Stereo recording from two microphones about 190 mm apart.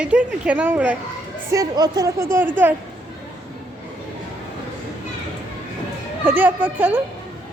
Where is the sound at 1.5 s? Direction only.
20° right (ahead or behind).